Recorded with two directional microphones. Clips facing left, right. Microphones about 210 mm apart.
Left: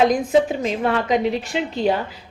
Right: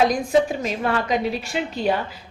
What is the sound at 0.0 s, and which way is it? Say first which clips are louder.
Speech: left 2 dB; 20° left (ahead or behind).